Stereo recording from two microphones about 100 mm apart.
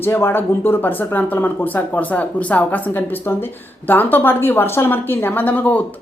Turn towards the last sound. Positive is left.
turn(degrees=15)  # may be behind; listen again after turning